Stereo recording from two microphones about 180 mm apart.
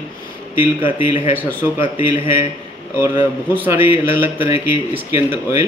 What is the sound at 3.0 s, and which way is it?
Speech, 10° right (ahead or behind).